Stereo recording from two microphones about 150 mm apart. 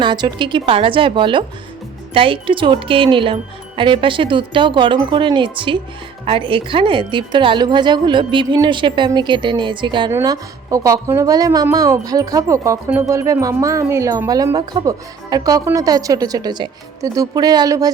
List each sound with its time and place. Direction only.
0.0 s speech: 30° right (ahead or behind)
10.1 s a woman's voice: 20° right (ahead or behind)